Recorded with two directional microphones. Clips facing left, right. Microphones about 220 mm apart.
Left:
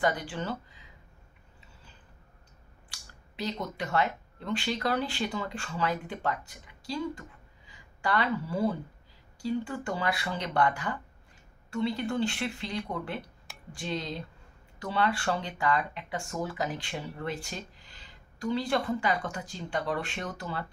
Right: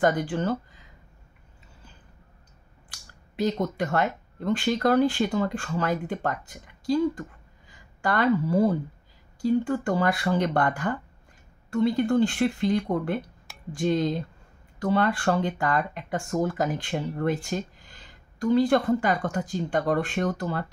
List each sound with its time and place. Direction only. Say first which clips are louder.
0.0 s speech: right 6 dB; 50° right (ahead or behind)
2.9 s speech: right 2 dB; 50° right (ahead or behind)